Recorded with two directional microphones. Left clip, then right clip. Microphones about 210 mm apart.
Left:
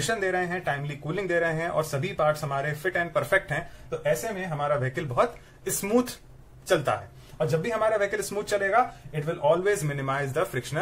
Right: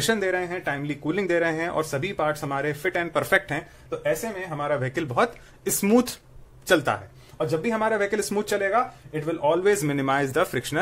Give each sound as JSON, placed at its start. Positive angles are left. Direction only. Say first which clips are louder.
{"t": 0.0, "sound": "speech", "louder": "right 2 dB", "side_deg": -40}